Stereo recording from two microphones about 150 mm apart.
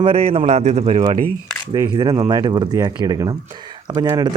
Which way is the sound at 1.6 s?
30° right (ahead or behind).